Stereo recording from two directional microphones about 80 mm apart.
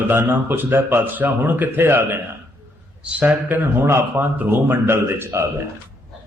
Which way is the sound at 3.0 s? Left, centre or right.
Centre.